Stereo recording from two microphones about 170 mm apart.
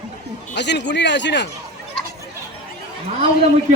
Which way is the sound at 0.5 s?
90° left.